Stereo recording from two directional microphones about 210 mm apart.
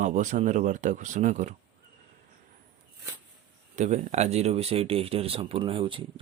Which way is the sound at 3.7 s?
35° right (ahead or behind).